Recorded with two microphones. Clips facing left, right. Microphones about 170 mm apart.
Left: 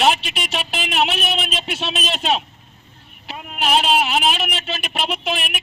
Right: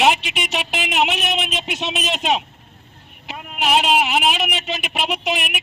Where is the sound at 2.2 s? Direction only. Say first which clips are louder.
Even; 15° right (ahead or behind).